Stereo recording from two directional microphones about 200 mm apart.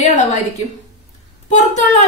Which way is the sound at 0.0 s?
35° left (ahead or behind).